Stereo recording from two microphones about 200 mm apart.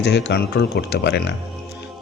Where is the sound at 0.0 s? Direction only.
60° left (ahead or behind).